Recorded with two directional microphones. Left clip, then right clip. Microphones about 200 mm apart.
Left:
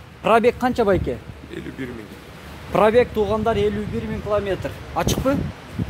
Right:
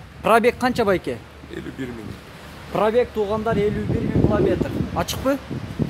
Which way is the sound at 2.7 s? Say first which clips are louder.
Left 3 dB; 30° left (ahead or behind).